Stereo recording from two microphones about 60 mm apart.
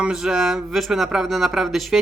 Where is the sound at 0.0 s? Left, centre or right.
Centre.